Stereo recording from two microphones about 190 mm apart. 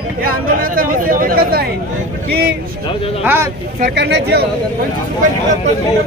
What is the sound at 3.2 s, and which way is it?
Speech, 10° right (ahead or behind).